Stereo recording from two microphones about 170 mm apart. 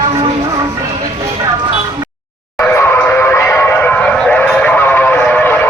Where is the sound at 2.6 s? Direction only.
15° left (ahead or behind).